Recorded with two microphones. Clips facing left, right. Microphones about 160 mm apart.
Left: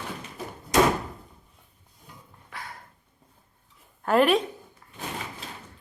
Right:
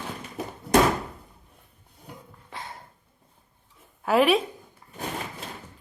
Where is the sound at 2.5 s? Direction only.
25° right (ahead or behind).